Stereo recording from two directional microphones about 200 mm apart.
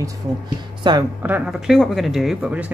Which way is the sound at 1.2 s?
5° right (ahead or behind).